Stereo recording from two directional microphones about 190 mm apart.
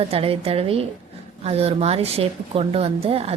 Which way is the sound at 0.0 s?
30° right (ahead or behind).